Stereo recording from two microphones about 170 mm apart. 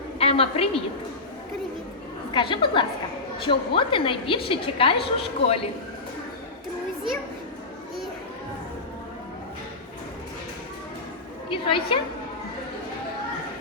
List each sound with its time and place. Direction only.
0.2 s a woman's voice: 35° left (ahead or behind)
2.3 s a woman's voice: 30° left (ahead or behind)
11.4 s a woman's voice: 30° left (ahead or behind)